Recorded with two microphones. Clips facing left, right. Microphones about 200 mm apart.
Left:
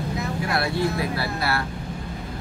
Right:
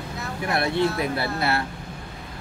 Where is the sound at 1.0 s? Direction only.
25° right (ahead or behind).